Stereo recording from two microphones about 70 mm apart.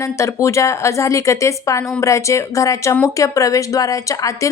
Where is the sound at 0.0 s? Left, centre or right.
Left.